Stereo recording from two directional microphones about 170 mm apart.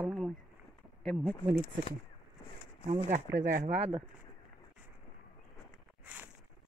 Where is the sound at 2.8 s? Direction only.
40° right (ahead or behind).